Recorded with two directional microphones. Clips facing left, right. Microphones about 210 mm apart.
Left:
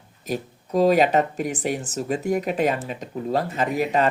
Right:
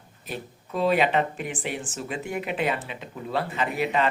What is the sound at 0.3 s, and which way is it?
Speech, 40° left (ahead or behind).